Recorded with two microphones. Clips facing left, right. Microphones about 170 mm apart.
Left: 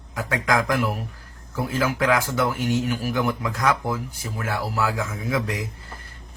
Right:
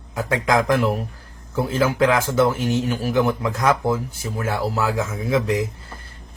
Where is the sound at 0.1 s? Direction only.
25° right (ahead or behind).